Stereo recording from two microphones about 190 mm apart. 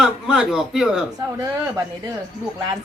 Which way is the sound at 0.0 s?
5° right (ahead or behind).